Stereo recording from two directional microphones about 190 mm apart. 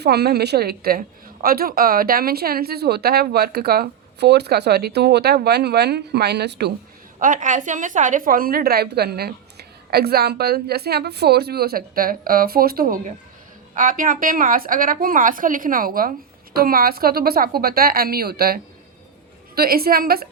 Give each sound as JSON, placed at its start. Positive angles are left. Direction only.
{"t": 0.0, "sound": "a woman's voice", "side_deg": -55}
{"t": 7.2, "sound": "a woman's voice", "side_deg": -45}